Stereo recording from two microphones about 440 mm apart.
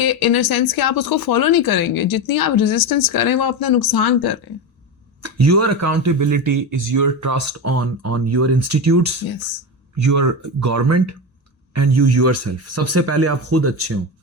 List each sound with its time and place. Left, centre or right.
0.0 s speech: left
5.2 s a man's voice: right